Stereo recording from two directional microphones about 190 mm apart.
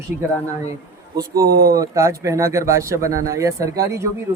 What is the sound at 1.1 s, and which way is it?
Speech, 15° right (ahead or behind).